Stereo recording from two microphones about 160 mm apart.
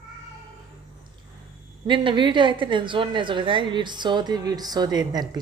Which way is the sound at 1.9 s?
30° right (ahead or behind).